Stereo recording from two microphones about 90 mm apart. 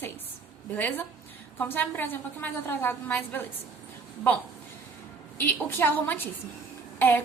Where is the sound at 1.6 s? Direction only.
20° left (ahead or behind).